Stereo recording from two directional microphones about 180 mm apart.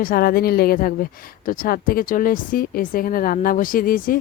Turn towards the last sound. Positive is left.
turn(degrees=50)  # may be behind; listen again after turning